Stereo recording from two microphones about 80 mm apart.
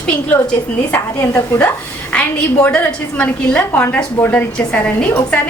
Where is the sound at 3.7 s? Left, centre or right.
Left.